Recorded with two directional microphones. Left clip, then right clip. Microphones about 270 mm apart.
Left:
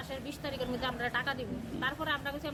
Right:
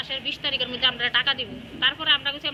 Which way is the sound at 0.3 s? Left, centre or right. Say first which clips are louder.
Right 11 dB; centre.